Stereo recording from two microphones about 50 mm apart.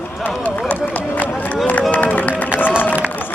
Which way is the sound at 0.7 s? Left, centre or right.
Left.